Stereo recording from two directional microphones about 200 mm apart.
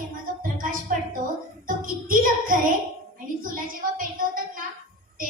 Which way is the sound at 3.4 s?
45° right (ahead or behind).